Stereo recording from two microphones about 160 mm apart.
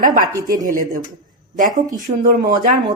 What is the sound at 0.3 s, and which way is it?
Speech, 25° right (ahead or behind).